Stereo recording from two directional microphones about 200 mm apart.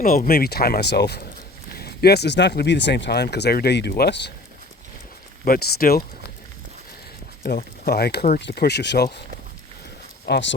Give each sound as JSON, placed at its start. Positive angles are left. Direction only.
{"t": 0.0, "sound": "speech", "side_deg": 45}
{"t": 5.5, "sound": "speech", "side_deg": 50}
{"t": 7.4, "sound": "speech", "side_deg": 55}
{"t": 10.2, "sound": "speech", "side_deg": 55}